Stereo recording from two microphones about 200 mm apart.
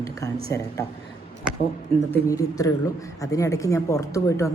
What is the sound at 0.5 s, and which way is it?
Speech, 15° left (ahead or behind).